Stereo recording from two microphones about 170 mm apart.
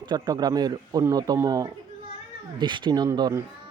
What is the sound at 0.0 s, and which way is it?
A man's voice, 25° right (ahead or behind).